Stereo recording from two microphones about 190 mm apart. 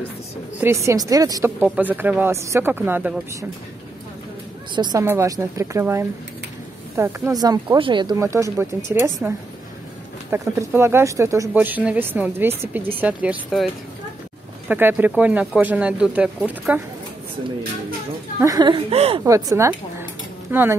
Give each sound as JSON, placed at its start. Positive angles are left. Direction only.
{"t": 0.6, "sound": "speech", "side_deg": -15}
{"t": 4.7, "sound": "speech", "side_deg": -25}
{"t": 10.3, "sound": "speech", "side_deg": -15}
{"t": 14.7, "sound": "speech", "side_deg": -10}
{"t": 18.4, "sound": "speech", "side_deg": -20}
{"t": 19.2, "sound": "speech", "side_deg": -15}